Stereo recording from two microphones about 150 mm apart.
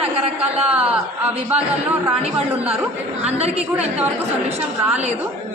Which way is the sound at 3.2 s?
45° right (ahead or behind).